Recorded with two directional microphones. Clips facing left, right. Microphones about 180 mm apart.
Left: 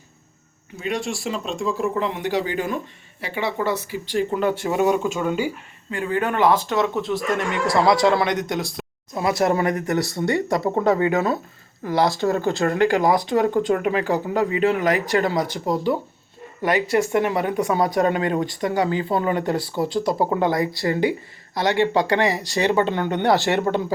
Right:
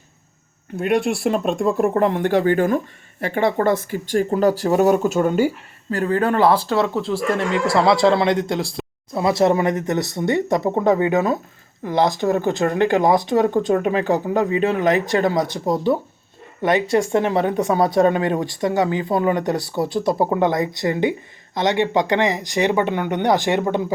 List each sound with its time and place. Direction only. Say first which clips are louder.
0.8 s speech: right 7 dB; 60° right (ahead or behind); by 23.8 s 15° right (ahead or behind)